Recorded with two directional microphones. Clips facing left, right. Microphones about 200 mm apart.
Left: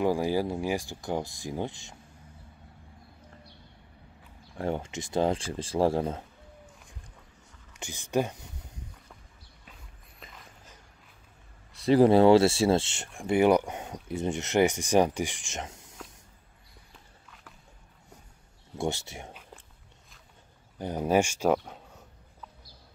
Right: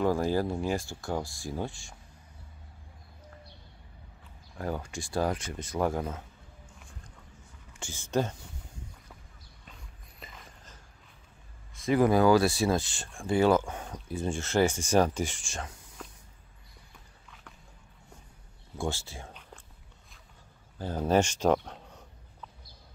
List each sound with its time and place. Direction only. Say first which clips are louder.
0.0 s speech: left 1 dB; 15° left (ahead or behind)
4.6 s speech: left 3 dB; 25° left (ahead or behind)
7.7 s speech: left 1 dB; 20° left (ahead or behind)
10.2 s dog: right 1 dB; centre (ahead or behind)
11.8 s speech: left 4 dB; 30° left (ahead or behind)
17.3 s a sound: right 1 dB; centre (ahead or behind)
18.8 s speech: left 3 dB; 20° left (ahead or behind)
20.7 s speech: left 1 dB; 15° left (ahead or behind)